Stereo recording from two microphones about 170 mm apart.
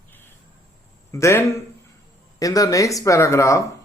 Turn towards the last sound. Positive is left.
turn(degrees=15)  # may be behind; listen again after turning